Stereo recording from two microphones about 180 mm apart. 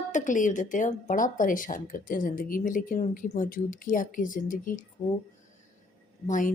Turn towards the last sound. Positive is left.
turn(degrees=45)  # may be behind; listen again after turning